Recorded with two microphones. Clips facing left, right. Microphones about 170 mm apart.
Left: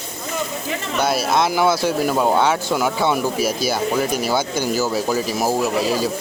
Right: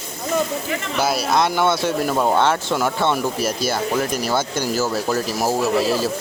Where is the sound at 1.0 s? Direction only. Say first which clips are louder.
Left 1 dB; centre (ahead or behind).